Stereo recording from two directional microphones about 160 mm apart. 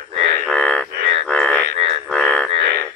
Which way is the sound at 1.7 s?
40° right (ahead or behind).